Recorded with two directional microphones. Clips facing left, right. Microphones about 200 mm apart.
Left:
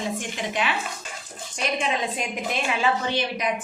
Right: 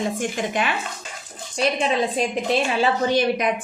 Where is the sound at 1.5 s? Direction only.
30° right (ahead or behind).